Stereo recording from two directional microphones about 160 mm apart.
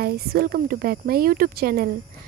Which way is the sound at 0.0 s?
70° right (ahead or behind).